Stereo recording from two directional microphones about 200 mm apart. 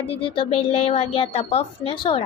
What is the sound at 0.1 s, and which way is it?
Speech, 25° left (ahead or behind).